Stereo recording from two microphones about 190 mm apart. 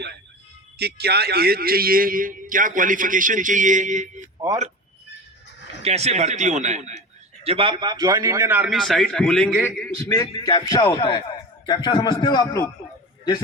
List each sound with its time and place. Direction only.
0.8 s a man's voice: 60° right (ahead or behind); by 4.2 s 40° right (ahead or behind)
5.8 s a man's voice: 35° right (ahead or behind)
7.4 s a man's voice: 30° right (ahead or behind); by 12.7 s 20° left (ahead or behind)